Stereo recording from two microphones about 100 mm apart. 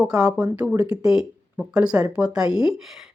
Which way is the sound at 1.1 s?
5° right (ahead or behind).